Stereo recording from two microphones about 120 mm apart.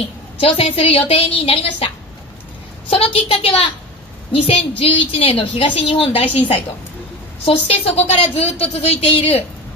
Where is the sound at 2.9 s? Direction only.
55° left (ahead or behind).